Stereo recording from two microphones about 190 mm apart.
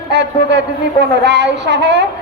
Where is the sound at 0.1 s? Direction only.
65° right (ahead or behind).